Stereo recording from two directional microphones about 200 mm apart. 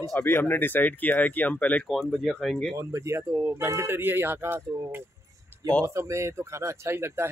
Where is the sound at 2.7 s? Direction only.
15° right (ahead or behind).